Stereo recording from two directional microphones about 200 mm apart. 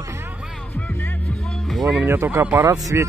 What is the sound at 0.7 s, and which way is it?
Music, 10° left (ahead or behind).